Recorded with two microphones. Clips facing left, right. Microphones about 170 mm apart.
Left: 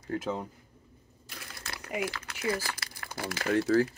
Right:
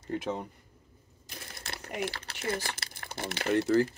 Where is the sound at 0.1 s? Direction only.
Centre (ahead or behind).